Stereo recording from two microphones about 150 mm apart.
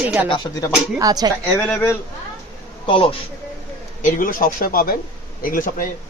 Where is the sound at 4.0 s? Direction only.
65° left (ahead or behind).